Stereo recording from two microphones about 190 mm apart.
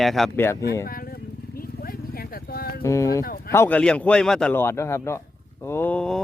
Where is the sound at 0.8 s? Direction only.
50° left (ahead or behind).